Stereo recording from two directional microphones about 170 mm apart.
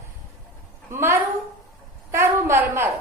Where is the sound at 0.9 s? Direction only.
15° right (ahead or behind).